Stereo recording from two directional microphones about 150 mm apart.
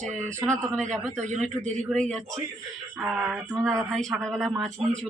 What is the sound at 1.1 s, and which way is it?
Speech, 55° right (ahead or behind).